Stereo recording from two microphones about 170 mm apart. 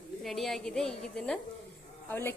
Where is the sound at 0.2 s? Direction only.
Centre (ahead or behind).